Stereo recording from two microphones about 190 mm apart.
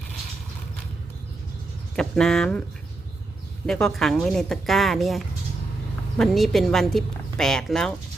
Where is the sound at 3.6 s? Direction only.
Centre (ahead or behind).